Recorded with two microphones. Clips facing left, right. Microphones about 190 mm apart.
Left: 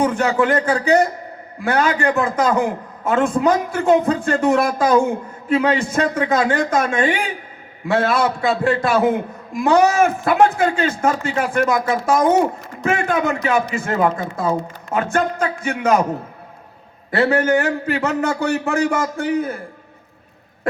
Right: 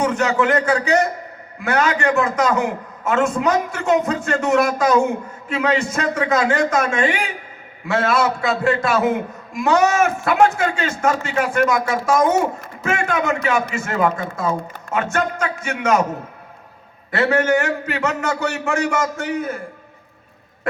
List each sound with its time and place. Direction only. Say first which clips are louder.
0.0 s a man's voice: left 1 dB; 30° left (ahead or behind)
17.1 s a man's voice: left 1 dB; 35° left (ahead or behind)